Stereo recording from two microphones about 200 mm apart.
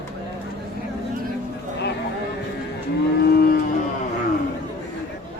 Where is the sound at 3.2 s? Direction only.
50° left (ahead or behind).